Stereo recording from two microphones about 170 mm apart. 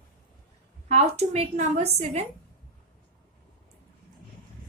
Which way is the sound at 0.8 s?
40° right (ahead or behind).